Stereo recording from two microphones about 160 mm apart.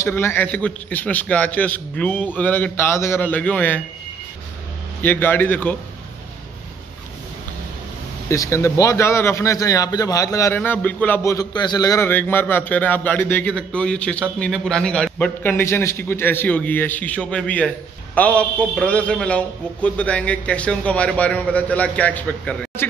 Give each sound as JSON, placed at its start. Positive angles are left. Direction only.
{"t": 0.0, "sound": "a man's voice", "side_deg": 15}
{"t": 5.0, "sound": "a man's voice", "side_deg": 10}
{"t": 8.3, "sound": "a man's voice", "side_deg": 15}
{"t": 11.3, "sound": "a man's voice", "side_deg": 25}